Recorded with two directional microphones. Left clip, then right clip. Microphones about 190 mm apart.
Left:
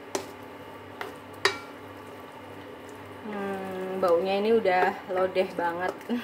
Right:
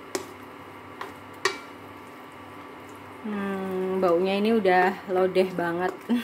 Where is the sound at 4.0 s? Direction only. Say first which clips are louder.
Even; 35° right (ahead or behind).